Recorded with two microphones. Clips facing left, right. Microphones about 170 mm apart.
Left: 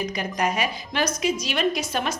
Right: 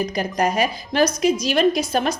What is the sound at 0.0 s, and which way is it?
A woman's voice, 40° right (ahead or behind).